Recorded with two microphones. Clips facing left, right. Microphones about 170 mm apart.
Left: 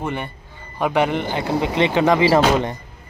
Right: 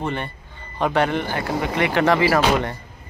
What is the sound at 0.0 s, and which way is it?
Speech, 10° left (ahead or behind).